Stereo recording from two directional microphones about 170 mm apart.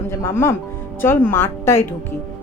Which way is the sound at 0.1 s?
15° left (ahead or behind).